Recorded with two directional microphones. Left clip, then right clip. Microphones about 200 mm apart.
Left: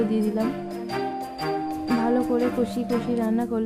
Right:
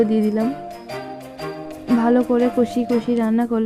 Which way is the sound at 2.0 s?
30° right (ahead or behind).